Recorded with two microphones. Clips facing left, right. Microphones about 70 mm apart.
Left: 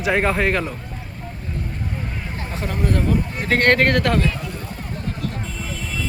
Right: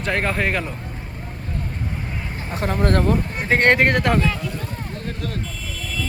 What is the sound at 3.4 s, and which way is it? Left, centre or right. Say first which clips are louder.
Speech: even; centre.